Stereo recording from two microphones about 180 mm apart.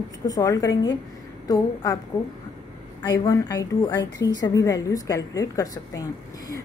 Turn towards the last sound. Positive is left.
turn(degrees=20)  # may be behind; listen again after turning